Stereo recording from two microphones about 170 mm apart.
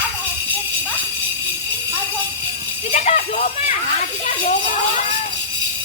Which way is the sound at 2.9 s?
45° left (ahead or behind).